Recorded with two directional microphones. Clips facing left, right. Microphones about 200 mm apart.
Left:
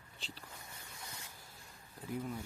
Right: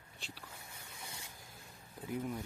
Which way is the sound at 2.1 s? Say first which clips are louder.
Right 1 dB; 10° right (ahead or behind).